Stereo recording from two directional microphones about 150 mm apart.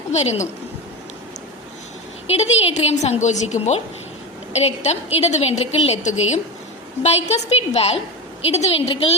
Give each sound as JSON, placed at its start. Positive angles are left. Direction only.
{"t": 0.1, "sound": "a woman's voice", "side_deg": 50}
{"t": 2.3, "sound": "a woman's voice", "side_deg": 45}